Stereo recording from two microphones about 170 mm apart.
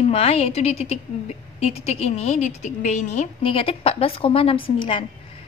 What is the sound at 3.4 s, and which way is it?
A woman's voice, 35° left (ahead or behind).